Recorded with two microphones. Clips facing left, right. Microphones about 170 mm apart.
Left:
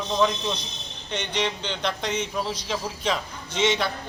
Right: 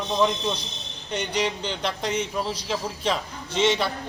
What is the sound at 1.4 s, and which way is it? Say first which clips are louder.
A man's voice: even; 5° right (ahead or behind).